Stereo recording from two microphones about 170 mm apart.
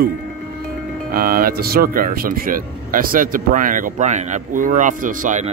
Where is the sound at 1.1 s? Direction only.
60° right (ahead or behind).